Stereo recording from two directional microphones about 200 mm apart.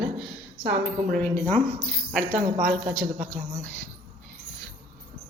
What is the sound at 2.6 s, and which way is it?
Speech, centre (ahead or behind).